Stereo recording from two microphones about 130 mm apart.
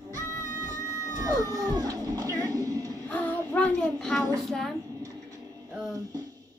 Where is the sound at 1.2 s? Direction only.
30° right (ahead or behind).